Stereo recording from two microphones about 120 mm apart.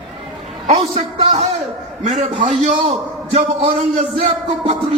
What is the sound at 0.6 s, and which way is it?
Speech, 70° right (ahead or behind).